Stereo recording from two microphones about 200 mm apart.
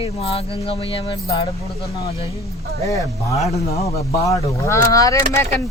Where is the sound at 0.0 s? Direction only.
30° left (ahead or behind).